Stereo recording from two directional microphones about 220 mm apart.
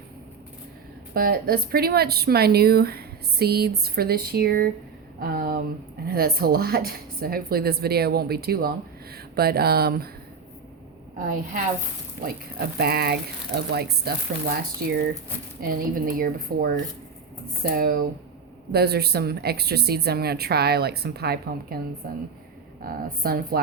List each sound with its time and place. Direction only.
1.1 s speech: 40° right (ahead or behind)
12.5 s speech: 45° right (ahead or behind)
22.8 s speech: 40° right (ahead or behind)